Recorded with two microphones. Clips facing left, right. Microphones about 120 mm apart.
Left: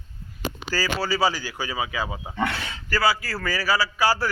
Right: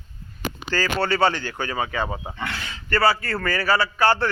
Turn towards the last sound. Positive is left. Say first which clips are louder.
# right 2 dB
turn(degrees=5)  # may be behind; listen again after turning